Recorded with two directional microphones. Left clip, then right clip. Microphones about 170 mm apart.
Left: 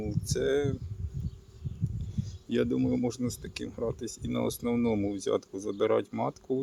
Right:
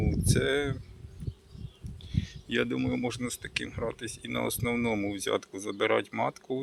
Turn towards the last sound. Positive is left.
turn(degrees=40)  # may be behind; listen again after turning